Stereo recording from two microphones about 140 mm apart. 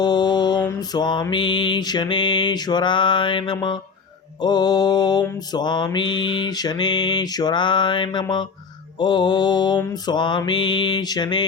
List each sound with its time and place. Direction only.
0.0 s mantra: 30° left (ahead or behind)